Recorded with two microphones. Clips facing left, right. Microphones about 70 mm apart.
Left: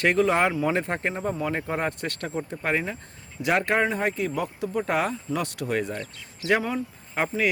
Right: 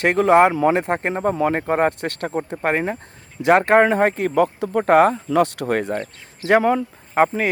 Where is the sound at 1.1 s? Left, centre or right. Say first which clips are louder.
Right 8 dB; right.